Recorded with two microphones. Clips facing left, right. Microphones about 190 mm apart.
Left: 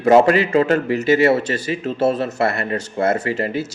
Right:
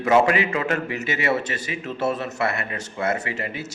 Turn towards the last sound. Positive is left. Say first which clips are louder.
# left 8 dB
turn(degrees=35)  # may be behind; listen again after turning